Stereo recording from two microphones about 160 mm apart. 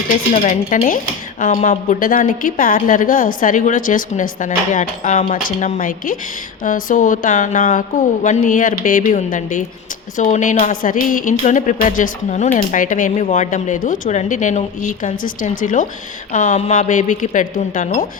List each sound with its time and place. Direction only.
0.4 s a woman's voice: 50° left (ahead or behind)